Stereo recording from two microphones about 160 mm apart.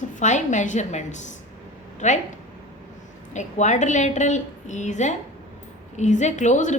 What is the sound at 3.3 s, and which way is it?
A woman's voice, 50° left (ahead or behind).